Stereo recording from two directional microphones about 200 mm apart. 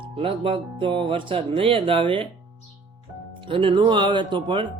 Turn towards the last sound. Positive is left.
turn(degrees=-25)  # may be behind; listen again after turning